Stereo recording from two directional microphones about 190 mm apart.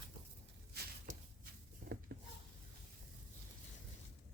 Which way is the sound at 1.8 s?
45° right (ahead or behind).